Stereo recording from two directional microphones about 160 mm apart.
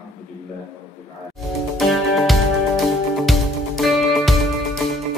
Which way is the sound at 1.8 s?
Centre (ahead or behind).